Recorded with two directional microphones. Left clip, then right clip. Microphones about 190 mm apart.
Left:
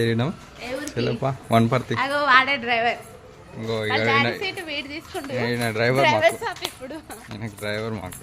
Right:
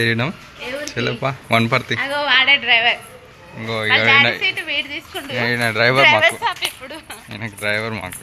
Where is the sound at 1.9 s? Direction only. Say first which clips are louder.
Even; 60° left (ahead or behind); by 3.0 s 40° left (ahead or behind).